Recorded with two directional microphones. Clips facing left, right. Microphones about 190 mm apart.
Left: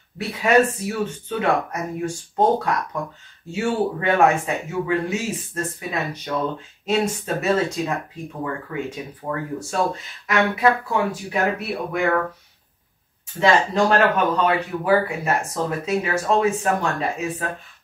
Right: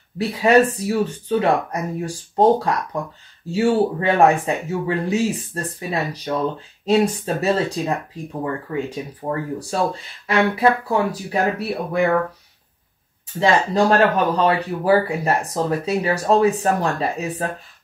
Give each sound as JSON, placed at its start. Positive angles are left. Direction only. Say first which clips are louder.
{"t": 0.2, "sound": "speech", "louder": "right 3 dB", "side_deg": -35}
{"t": 13.4, "sound": "speech", "louder": "right 1 dB", "side_deg": -35}